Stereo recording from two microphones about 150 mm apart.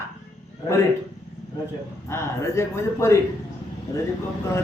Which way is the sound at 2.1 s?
20° left (ahead or behind).